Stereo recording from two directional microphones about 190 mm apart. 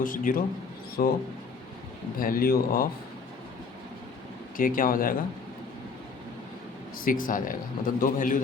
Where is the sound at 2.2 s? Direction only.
50° left (ahead or behind).